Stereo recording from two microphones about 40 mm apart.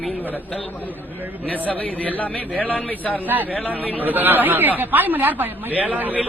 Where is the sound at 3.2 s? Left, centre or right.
Right.